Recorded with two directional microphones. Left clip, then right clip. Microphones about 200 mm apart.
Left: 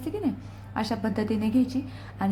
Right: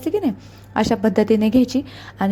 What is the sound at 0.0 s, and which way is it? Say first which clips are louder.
A woman's voice: right 9 dB; 35° right (ahead or behind).